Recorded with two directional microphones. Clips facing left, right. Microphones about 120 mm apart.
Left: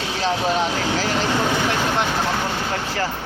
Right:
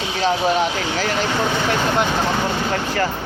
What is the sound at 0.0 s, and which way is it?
Vehicle, centre (ahead or behind).